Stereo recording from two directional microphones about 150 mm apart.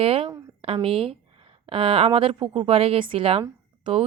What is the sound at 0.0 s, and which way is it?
Speech, 40° right (ahead or behind).